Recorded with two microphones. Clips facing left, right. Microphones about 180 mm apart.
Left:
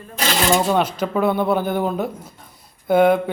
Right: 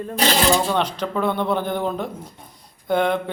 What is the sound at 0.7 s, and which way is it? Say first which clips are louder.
Speech: left 3 dB; 5° left (ahead or behind).